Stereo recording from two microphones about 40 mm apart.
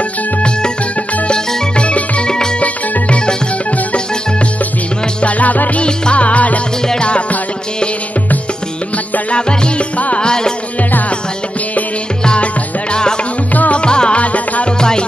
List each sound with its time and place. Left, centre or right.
1.8 s music: left
2.2 s music: centre
2.6 s music: left
5.2 s music: left
5.8 s music: left
9.3 s music: left
10.2 s music: centre
10.8 s music: left
13.5 s music: left
13.7 s music: left
14.2 s music: left
14.8 s music: centre